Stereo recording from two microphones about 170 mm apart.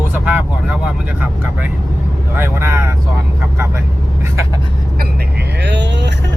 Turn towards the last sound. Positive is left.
turn(degrees=-90)